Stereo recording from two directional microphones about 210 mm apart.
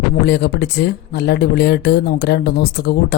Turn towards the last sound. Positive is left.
turn(degrees=50)  # may be behind; listen again after turning